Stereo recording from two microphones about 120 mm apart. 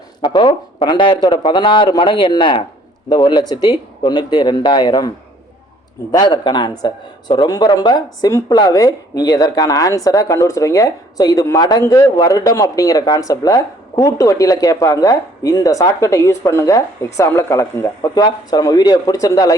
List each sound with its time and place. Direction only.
0.2 s speech: 40° left (ahead or behind)